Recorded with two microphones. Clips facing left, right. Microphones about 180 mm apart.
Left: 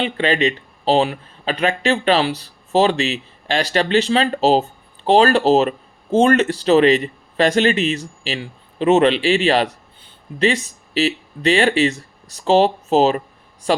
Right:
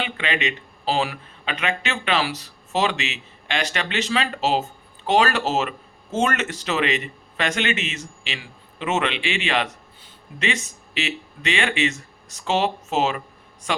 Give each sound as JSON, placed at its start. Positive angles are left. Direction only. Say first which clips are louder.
{"t": 0.0, "sound": "speech", "louder": "left 8 dB", "side_deg": 35}